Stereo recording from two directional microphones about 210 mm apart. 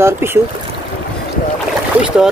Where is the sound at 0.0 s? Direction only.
10° right (ahead or behind).